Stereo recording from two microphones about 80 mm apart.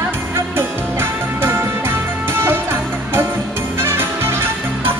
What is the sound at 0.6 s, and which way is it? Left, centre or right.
Music, right.